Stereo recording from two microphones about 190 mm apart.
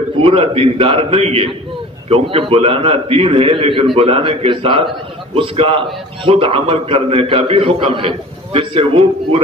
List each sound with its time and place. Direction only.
0.2 s a man's voice: 30° right (ahead or behind)